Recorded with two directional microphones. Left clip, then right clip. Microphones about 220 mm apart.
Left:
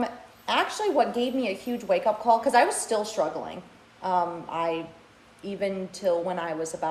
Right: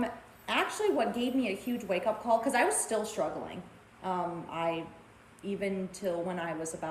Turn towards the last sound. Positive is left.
turn(degrees=20)  # may be behind; listen again after turning